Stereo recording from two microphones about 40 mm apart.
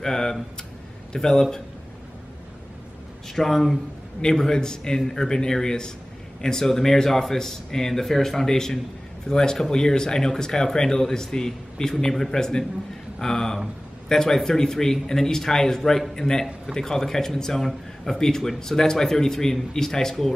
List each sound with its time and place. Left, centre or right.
0.0 s a sound: centre
1.1 s a man's voice: centre
3.3 s a man's voice: centre